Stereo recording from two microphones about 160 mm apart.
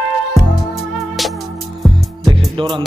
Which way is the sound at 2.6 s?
35° right (ahead or behind).